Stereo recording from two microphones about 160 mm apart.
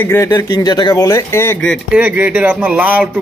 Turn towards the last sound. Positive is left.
turn(degrees=-10)  # may be behind; listen again after turning